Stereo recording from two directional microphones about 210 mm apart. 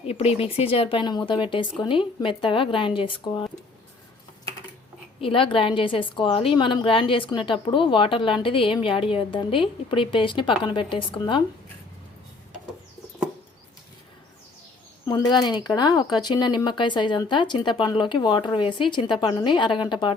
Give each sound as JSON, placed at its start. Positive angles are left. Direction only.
{"t": 0.0, "sound": "a woman's voice", "side_deg": 30}
{"t": 5.2, "sound": "a woman's voice", "side_deg": 25}
{"t": 15.0, "sound": "a woman's voice", "side_deg": 20}